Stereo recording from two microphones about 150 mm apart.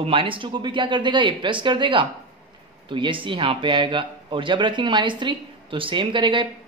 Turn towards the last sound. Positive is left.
turn(degrees=-35)  # may be behind; listen again after turning